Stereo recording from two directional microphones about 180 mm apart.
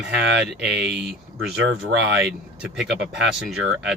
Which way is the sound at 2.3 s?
5° right (ahead or behind).